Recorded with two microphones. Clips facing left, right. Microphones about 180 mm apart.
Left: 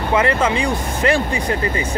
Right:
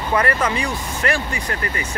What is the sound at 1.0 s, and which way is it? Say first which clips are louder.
Speech: left 5 dB; 20° left (ahead or behind).